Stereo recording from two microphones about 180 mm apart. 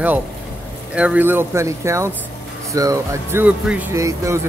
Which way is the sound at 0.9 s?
5° right (ahead or behind).